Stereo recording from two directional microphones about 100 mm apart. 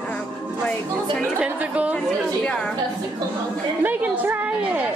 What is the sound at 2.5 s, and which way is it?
Speech, 5° left (ahead or behind).